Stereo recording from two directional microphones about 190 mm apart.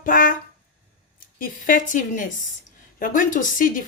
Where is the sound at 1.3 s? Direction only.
45° left (ahead or behind).